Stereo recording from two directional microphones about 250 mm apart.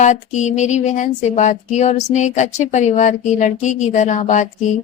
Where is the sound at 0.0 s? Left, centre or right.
Left.